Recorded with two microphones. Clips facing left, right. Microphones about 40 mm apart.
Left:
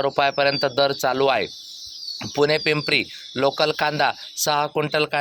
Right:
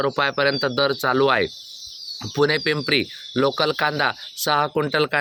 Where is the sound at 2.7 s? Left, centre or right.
Centre.